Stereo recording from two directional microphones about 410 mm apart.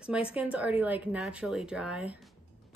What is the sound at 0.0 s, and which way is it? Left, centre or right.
Speech, centre.